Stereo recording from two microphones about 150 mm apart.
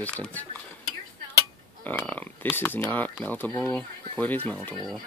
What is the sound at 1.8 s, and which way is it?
Speech, 10° left (ahead or behind).